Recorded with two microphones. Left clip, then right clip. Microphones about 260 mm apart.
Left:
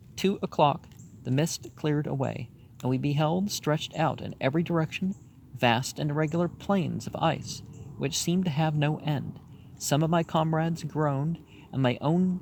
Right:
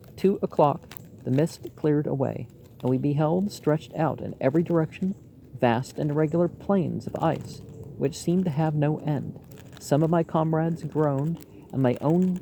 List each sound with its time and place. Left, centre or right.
0.2 s speech: left